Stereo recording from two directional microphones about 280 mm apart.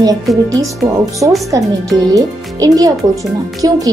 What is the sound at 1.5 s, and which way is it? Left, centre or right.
A child's voice, centre.